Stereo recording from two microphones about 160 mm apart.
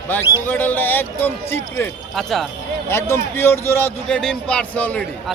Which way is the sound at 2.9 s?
15° left (ahead or behind).